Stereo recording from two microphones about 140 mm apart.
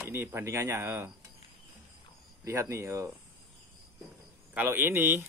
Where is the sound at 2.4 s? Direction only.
20° right (ahead or behind).